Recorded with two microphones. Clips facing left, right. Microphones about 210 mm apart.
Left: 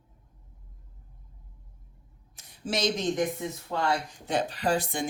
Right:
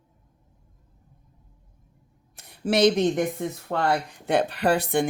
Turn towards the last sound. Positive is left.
turn(degrees=-60)  # may be behind; listen again after turning